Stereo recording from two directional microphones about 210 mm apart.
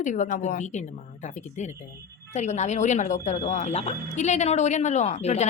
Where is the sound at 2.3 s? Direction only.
35° left (ahead or behind).